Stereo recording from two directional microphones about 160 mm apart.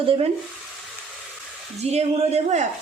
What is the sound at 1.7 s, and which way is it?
Speech, 45° right (ahead or behind).